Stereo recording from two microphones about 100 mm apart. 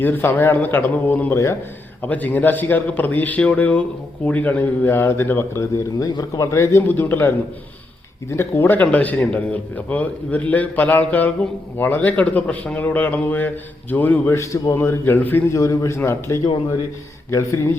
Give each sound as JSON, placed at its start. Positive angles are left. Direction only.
{"t": 0.0, "sound": "a man's voice", "side_deg": 20}
{"t": 14.3, "sound": "a man's voice", "side_deg": 30}
{"t": 15.5, "sound": "a man's voice", "side_deg": 35}